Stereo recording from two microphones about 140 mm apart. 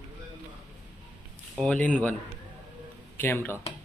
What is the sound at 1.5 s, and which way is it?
Speech, 5° left (ahead or behind).